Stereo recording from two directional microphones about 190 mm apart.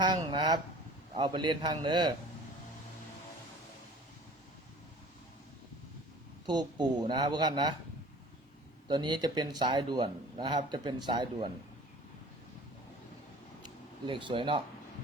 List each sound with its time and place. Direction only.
0.0 s a man's voice: 25° right (ahead or behind)
6.4 s a man's voice: 20° right (ahead or behind)
8.9 s a man's voice: 25° right (ahead or behind)
13.6 s a sound: 25° right (ahead or behind)